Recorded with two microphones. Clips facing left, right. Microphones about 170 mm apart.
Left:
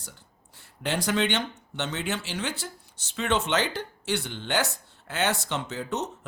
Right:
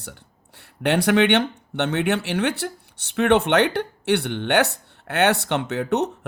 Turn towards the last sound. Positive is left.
turn(degrees=-65)  # may be behind; listen again after turning